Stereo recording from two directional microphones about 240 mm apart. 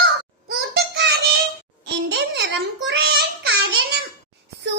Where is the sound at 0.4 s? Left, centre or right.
Right.